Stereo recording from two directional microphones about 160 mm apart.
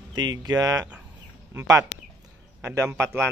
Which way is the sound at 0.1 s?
25° right (ahead or behind).